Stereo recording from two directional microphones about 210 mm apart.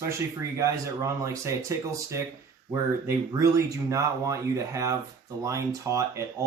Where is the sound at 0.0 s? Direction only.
15° right (ahead or behind).